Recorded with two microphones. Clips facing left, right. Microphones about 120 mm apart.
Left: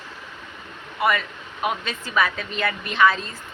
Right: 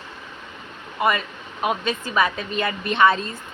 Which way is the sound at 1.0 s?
25° right (ahead or behind).